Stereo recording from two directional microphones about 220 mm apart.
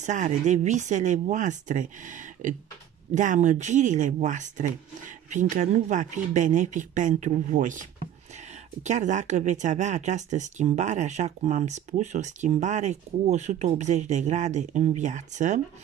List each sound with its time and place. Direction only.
0.0 s speech: 35° right (ahead or behind)